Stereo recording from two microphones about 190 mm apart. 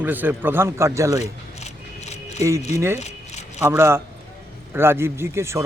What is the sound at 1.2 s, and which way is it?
Single-lens reflex camera, 35° left (ahead or behind).